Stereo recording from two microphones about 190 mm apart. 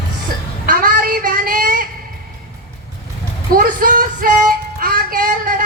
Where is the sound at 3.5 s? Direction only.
50° right (ahead or behind).